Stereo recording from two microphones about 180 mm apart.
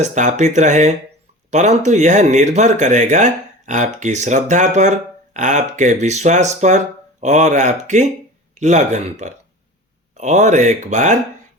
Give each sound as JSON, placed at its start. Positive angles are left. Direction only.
{"t": 0.0, "sound": "speech", "side_deg": -40}